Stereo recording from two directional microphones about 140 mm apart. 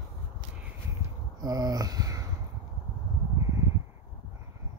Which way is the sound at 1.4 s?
25° right (ahead or behind).